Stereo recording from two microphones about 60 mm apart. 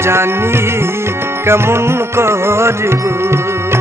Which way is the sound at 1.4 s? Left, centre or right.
Right.